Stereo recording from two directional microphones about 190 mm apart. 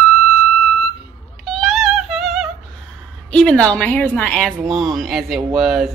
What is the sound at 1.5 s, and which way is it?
Music, centre (ahead or behind).